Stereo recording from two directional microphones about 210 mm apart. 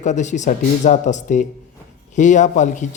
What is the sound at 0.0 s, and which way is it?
Speech, 35° left (ahead or behind).